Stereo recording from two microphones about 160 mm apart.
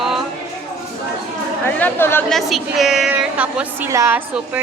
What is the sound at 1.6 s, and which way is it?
Speech, 15° left (ahead or behind).